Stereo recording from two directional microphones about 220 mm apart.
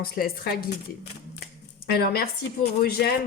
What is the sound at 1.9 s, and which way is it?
A woman's voice, 45° left (ahead or behind).